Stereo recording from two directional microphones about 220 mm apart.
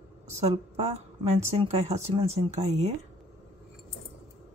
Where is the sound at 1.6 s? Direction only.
25° right (ahead or behind).